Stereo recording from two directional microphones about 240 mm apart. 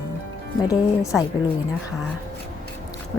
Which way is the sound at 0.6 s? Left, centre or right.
Centre.